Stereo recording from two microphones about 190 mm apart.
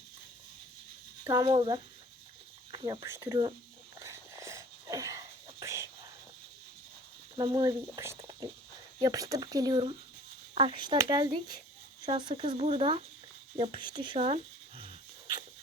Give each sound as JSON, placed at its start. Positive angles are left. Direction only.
{"t": 1.3, "sound": "speech", "side_deg": -20}
{"t": 4.0, "sound": "whispering", "side_deg": -15}
{"t": 7.3, "sound": "speech", "side_deg": -20}
{"t": 13.6, "sound": "a sound", "side_deg": -25}